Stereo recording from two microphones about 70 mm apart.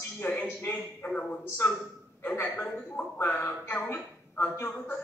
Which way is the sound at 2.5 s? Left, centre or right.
Centre.